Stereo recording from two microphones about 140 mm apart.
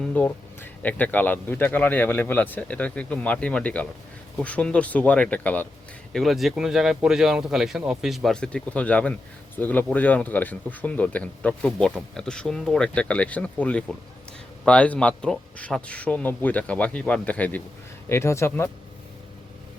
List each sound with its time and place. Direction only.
0.0 s speech: 10° left (ahead or behind)
6.1 s speech: centre (ahead or behind); by 18.7 s 20° left (ahead or behind)